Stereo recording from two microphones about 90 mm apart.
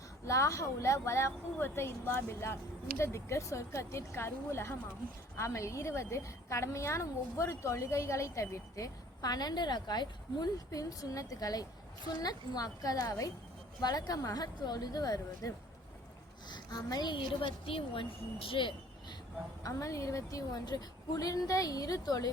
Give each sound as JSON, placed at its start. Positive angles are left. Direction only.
{"t": 0.3, "sound": "a woman's voice", "side_deg": 35}
{"t": 17.4, "sound": "speech", "side_deg": 80}
{"t": 19.6, "sound": "a woman's voice", "side_deg": 35}